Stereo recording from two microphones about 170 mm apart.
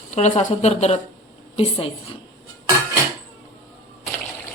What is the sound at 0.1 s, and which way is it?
Speech, 45° left (ahead or behind).